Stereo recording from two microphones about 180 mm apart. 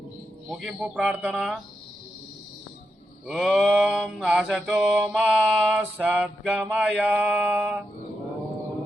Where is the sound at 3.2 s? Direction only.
5° right (ahead or behind).